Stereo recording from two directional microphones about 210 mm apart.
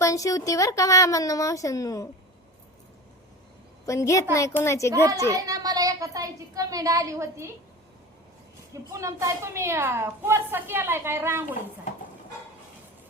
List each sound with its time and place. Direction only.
0.0 s a woman's voice: 15° left (ahead or behind)
3.8 s a woman's voice: 15° left (ahead or behind)
4.9 s a woman's voice: 15° right (ahead or behind)
8.7 s a woman's voice: 15° right (ahead or behind)